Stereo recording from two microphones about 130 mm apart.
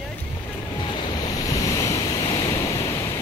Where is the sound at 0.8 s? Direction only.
35° left (ahead or behind).